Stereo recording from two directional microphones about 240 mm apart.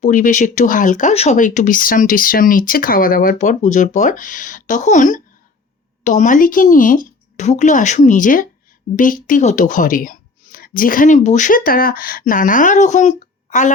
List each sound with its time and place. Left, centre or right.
0.0 s speech: left